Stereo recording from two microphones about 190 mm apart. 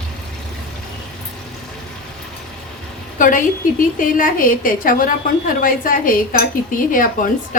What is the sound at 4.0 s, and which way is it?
A woman's voice, 45° left (ahead or behind).